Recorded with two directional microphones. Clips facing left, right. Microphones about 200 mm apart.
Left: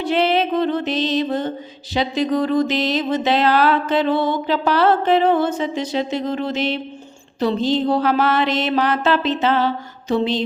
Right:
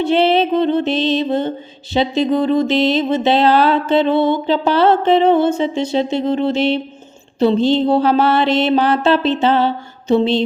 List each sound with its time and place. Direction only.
0.0 s music: 25° right (ahead or behind)